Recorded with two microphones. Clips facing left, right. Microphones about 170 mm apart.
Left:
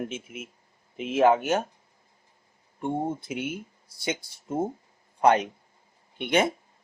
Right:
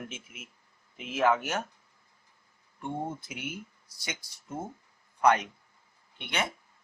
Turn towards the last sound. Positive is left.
turn(degrees=20)  # may be behind; listen again after turning